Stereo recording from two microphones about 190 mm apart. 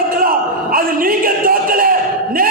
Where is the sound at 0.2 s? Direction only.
50° right (ahead or behind).